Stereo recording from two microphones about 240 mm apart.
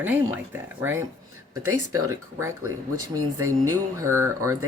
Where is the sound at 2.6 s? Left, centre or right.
Right.